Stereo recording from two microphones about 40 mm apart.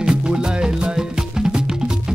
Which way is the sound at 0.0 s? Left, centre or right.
Right.